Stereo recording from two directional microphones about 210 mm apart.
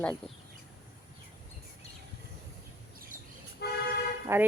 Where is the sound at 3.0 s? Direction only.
40° right (ahead or behind).